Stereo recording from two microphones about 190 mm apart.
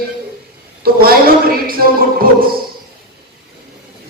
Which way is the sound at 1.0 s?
50° right (ahead or behind).